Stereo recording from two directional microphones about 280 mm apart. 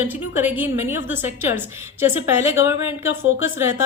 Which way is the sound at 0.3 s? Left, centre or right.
Centre.